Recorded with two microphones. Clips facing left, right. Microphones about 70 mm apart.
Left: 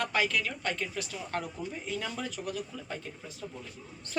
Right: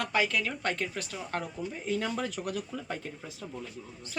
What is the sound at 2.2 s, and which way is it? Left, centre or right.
Speech, right.